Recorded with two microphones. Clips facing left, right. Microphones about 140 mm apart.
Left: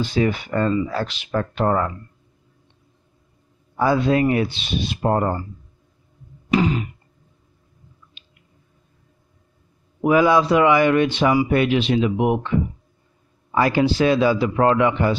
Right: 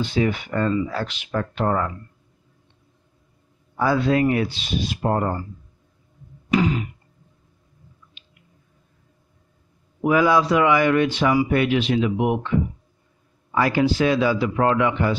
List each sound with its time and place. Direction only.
0.0 s speech: 40° left (ahead or behind)
3.7 s speech: 20° left (ahead or behind)
6.5 s a sound: 30° left (ahead or behind)
10.0 s speech: 25° left (ahead or behind)
13.5 s speech: 25° left (ahead or behind)